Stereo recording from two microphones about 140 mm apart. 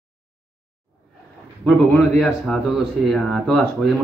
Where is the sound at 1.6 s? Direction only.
5° left (ahead or behind).